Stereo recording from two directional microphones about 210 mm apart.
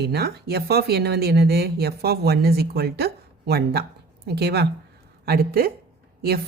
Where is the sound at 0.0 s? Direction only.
50° right (ahead or behind).